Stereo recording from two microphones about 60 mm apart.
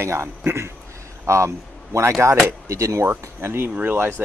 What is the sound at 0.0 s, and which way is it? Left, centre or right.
A man's voice, right.